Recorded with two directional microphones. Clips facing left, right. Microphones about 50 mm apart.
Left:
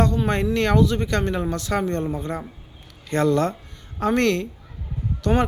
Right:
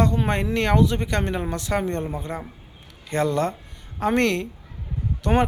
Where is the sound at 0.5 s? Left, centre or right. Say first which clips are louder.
Even; centre.